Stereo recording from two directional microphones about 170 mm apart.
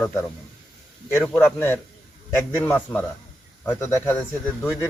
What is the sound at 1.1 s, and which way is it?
A man's voice, 10° left (ahead or behind).